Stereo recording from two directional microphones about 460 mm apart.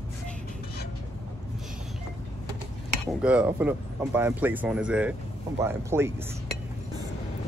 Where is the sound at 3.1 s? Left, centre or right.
Centre.